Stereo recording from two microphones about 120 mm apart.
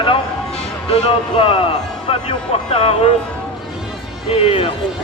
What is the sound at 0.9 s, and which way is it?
A man's voice, 55° left (ahead or behind).